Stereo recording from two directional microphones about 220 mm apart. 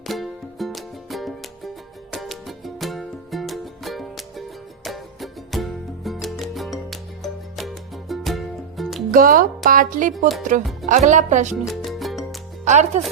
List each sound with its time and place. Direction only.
0.1 s music: centre (ahead or behind)
9.1 s speech: 40° right (ahead or behind)
11.5 s music: centre (ahead or behind)
12.6 s speech: 30° right (ahead or behind)